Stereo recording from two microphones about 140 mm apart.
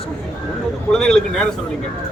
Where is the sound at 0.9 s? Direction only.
5° left (ahead or behind).